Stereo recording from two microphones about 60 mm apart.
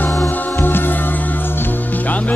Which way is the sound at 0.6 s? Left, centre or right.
Left.